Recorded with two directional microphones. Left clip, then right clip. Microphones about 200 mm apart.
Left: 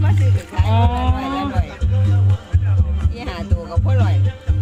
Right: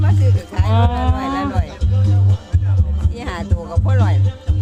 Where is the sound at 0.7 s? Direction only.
5° right (ahead or behind).